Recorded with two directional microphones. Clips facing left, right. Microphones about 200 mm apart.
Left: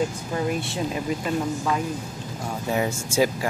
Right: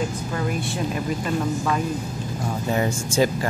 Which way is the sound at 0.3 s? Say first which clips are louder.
Even; 25° left (ahead or behind).